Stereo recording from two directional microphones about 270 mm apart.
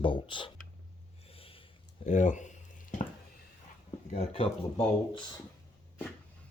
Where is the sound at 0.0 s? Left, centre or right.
Centre.